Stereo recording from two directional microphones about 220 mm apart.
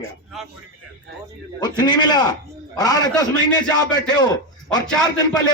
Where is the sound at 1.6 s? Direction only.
20° left (ahead or behind).